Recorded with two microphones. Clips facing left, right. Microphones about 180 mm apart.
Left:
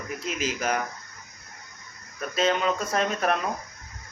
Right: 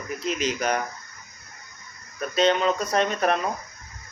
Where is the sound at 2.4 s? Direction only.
5° left (ahead or behind).